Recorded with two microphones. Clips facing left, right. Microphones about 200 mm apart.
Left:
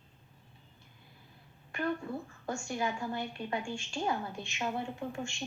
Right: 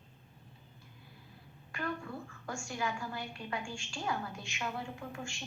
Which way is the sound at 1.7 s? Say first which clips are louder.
Left 5 dB; 25° left (ahead or behind).